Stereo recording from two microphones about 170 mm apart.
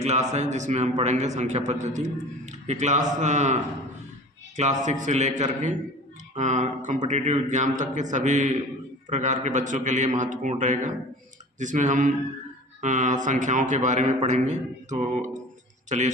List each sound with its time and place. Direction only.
0.0 s a man's voice: 40° right (ahead or behind)